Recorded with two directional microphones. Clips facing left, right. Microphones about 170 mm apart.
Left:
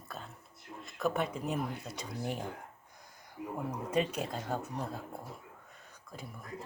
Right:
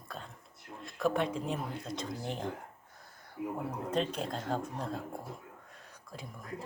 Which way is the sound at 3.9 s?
10° left (ahead or behind).